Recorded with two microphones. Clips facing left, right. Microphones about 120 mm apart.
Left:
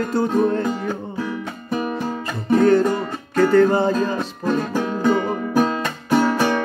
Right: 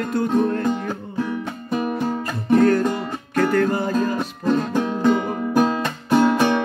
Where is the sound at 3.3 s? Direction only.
25° left (ahead or behind).